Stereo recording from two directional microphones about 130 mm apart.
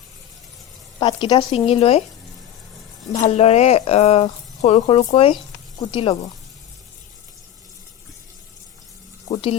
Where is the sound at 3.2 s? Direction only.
55° left (ahead or behind).